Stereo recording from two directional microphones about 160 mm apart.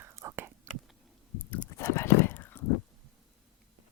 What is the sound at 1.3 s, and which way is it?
Whispering, 15° left (ahead or behind).